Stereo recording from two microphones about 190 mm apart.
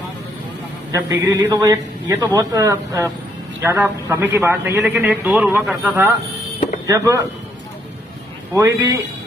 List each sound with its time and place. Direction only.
0.9 s a man's voice: 15° right (ahead or behind)
8.5 s a man's voice: 15° right (ahead or behind)